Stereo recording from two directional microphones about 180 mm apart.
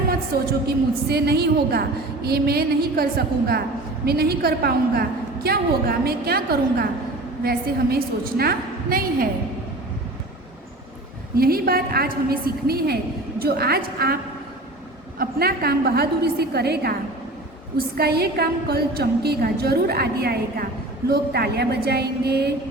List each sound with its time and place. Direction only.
0.3 s a woman's voice: 60° right (ahead or behind)
11.3 s a woman's voice: 55° right (ahead or behind)
15.2 s a woman's voice: 60° right (ahead or behind)